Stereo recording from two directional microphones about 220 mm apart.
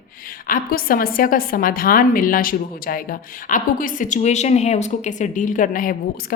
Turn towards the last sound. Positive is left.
turn(degrees=40)  # may be behind; listen again after turning